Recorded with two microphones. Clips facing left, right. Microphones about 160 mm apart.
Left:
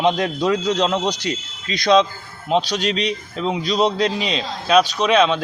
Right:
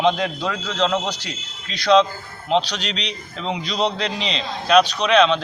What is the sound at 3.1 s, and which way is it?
A man's voice, 5° left (ahead or behind).